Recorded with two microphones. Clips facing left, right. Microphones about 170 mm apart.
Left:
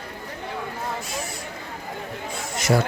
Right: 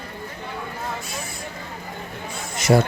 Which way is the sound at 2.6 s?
20° right (ahead or behind).